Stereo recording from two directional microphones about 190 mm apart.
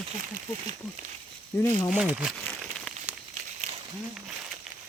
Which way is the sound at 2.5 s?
5° left (ahead or behind).